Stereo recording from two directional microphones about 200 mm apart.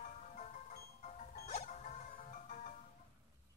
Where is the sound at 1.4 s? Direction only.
40° left (ahead or behind).